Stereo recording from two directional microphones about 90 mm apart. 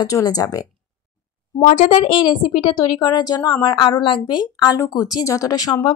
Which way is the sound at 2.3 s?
60° left (ahead or behind).